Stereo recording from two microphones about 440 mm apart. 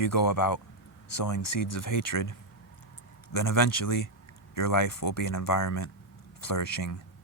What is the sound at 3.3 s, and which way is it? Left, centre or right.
Speech, left.